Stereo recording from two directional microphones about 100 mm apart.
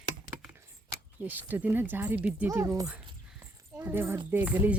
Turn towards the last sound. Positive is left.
turn(degrees=-15)  # may be behind; listen again after turning